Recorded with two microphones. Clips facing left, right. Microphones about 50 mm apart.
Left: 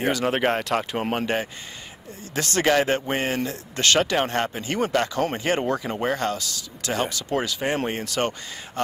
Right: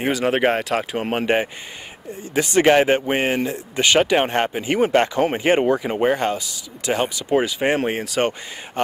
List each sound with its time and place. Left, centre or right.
0.0 s speech: centre
1.2 s speech: right